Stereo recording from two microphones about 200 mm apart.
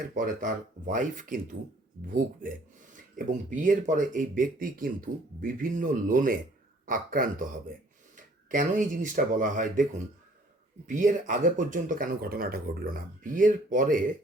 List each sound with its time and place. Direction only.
0.1 s speech: 40° right (ahead or behind)
2.9 s speech: 40° right (ahead or behind)
10.8 s speech: 40° right (ahead or behind)